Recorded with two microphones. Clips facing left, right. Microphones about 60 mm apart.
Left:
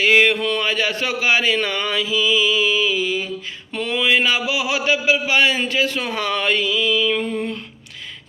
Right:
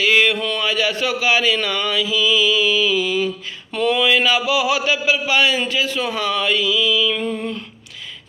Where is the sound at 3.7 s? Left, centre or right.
Left.